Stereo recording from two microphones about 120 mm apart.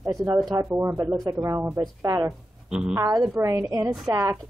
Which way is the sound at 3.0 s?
30° right (ahead or behind).